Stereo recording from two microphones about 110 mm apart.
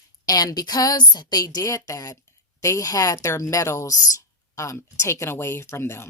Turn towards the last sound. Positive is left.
turn(degrees=25)  # may be behind; listen again after turning